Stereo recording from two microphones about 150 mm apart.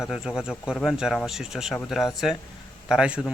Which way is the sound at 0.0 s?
5° right (ahead or behind).